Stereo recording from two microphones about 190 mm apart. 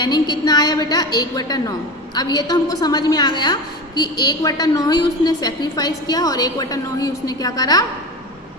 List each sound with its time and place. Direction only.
0.0 s a woman's voice: 20° left (ahead or behind)